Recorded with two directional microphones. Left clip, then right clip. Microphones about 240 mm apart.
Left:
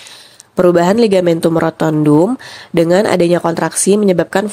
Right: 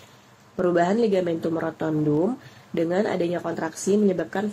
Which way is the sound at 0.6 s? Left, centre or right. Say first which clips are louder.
Left 11 dB; left.